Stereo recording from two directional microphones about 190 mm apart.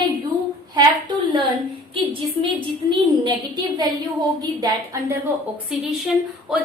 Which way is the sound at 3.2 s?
20° right (ahead or behind).